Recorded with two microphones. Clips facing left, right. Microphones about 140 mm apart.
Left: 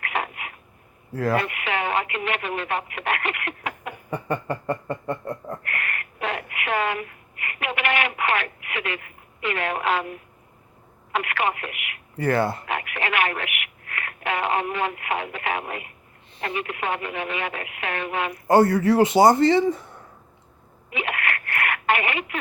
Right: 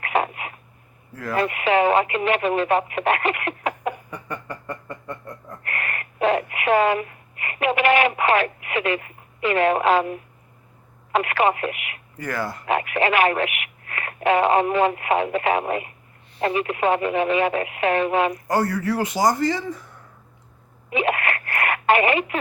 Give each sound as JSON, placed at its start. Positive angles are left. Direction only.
{"t": 0.0, "sound": "a sound", "side_deg": -30}
{"t": 1.1, "sound": "speech", "side_deg": 30}
{"t": 1.5, "sound": "speech", "side_deg": -35}
{"t": 4.1, "sound": "a sound", "side_deg": 30}
{"t": 5.6, "sound": "a sound", "side_deg": -30}
{"t": 11.1, "sound": "telephone", "side_deg": -35}
{"t": 12.1, "sound": "speech", "side_deg": 30}
{"t": 12.6, "sound": "speech", "side_deg": -30}
{"t": 18.4, "sound": "speech", "side_deg": 25}
{"t": 20.9, "sound": "telephone", "side_deg": -30}